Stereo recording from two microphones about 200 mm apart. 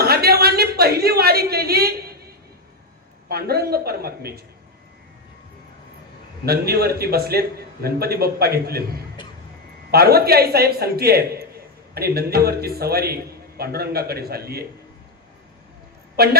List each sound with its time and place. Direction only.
0.0 s a sound: 50° right (ahead or behind)
3.2 s a man's voice: 50° right (ahead or behind)
6.4 s a man's voice: 50° right (ahead or behind)
16.1 s a woman's voice: 50° right (ahead or behind)